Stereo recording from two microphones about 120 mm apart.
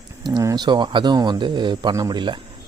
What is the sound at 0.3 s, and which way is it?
Speech, 35° right (ahead or behind).